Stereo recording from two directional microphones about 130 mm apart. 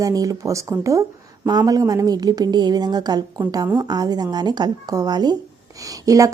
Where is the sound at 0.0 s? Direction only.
30° right (ahead or behind).